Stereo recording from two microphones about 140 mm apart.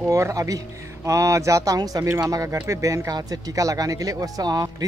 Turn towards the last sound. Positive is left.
turn(degrees=-25)  # may be behind; listen again after turning